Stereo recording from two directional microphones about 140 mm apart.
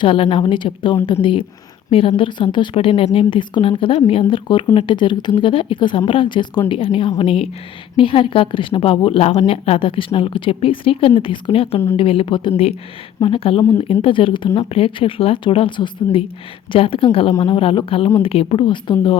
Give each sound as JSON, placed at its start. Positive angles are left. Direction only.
{"t": 0.0, "sound": "a woman's voice", "side_deg": 40}